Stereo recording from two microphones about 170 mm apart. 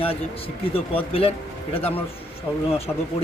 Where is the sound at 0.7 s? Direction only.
35° left (ahead or behind).